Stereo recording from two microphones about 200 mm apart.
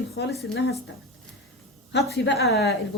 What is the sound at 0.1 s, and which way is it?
Speech, 55° left (ahead or behind).